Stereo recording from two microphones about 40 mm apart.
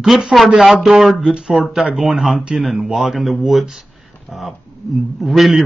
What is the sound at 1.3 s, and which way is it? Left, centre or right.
Speech, centre.